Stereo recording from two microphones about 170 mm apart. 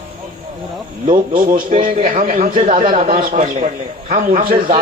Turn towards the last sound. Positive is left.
turn(degrees=-50)  # may be behind; listen again after turning